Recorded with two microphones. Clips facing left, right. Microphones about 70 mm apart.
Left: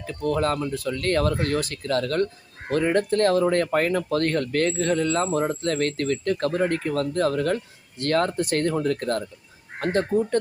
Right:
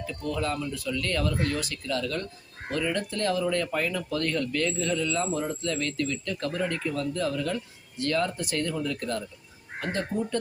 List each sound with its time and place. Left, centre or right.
0.0 s speech: left